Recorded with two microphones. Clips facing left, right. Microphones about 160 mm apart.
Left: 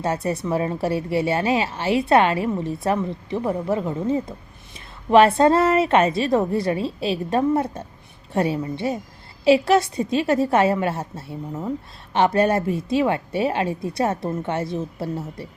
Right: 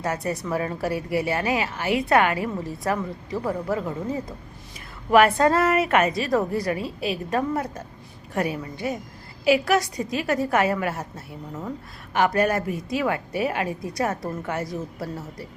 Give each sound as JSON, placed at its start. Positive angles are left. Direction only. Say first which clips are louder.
{"t": 0.0, "sound": "a woman's voice", "louder": "left 3 dB", "side_deg": 25}